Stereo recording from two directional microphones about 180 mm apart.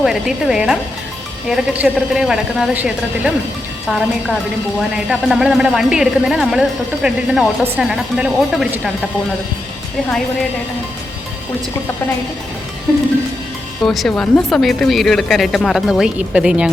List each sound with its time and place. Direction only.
0.0 s speech: centre (ahead or behind)
13.8 s speech: centre (ahead or behind)